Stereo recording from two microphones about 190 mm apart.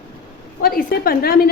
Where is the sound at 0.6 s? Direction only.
50° left (ahead or behind).